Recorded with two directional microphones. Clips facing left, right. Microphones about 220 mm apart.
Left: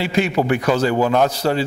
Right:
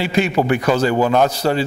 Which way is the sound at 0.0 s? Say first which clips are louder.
Right 1 dB; 15° right (ahead or behind).